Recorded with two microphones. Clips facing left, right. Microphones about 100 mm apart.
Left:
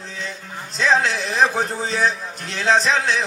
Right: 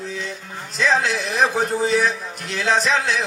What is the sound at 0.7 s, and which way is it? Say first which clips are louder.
A man's voice: left 1 dB; 35° left (ahead or behind).